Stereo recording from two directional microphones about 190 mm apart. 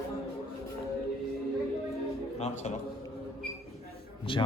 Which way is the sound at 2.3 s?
35° left (ahead or behind).